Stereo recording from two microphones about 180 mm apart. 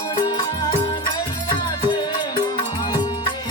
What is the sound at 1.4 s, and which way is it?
Music, 25° left (ahead or behind).